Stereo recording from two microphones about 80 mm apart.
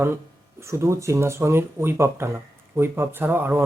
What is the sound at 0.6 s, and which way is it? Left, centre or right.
A man's voice, right.